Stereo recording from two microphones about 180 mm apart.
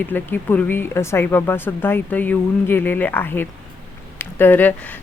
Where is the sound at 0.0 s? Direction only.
10° left (ahead or behind).